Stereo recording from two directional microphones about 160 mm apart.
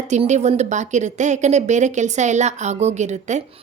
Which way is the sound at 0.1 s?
45° right (ahead or behind).